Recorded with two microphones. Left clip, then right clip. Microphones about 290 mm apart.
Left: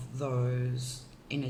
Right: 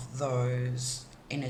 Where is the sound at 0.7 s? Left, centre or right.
Centre.